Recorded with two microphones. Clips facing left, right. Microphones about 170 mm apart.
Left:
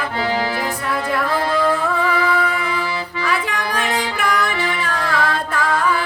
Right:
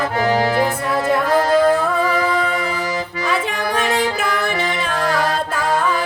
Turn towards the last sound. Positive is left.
turn(degrees=-40)  # may be behind; listen again after turning